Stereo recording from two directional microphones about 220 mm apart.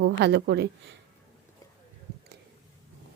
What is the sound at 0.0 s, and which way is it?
Speech, 50° right (ahead or behind).